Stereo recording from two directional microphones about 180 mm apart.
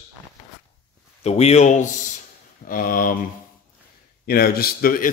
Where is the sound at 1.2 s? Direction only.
35° left (ahead or behind).